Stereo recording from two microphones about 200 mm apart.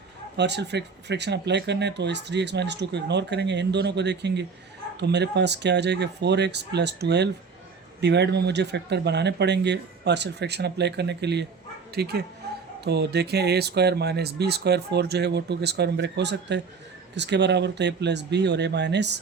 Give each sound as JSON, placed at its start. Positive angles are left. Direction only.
{"t": 0.3, "sound": "speech", "side_deg": -60}